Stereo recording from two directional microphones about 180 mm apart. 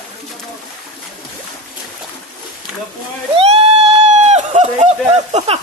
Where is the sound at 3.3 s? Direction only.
35° right (ahead or behind).